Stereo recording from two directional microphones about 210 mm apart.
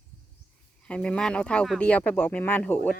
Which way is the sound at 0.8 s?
5° left (ahead or behind).